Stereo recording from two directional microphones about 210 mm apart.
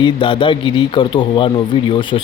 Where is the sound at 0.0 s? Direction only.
25° left (ahead or behind).